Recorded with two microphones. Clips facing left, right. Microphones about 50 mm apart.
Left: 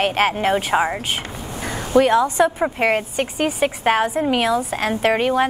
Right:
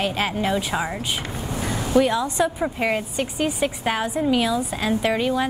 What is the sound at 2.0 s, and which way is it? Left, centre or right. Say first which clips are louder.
A woman's voice: left 5 dB; left.